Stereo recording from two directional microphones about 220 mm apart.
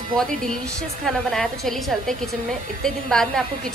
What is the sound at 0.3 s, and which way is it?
Speech, 35° right (ahead or behind).